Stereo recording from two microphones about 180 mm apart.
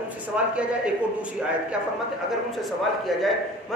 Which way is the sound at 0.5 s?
5° right (ahead or behind).